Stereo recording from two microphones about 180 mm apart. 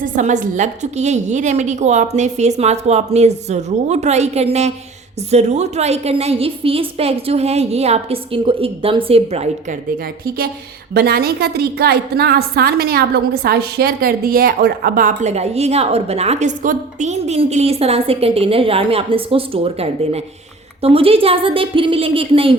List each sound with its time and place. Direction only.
0.0 s a woman's voice: 45° right (ahead or behind)
10.9 s a woman's voice: 60° right (ahead or behind); by 22.5 s 30° right (ahead or behind)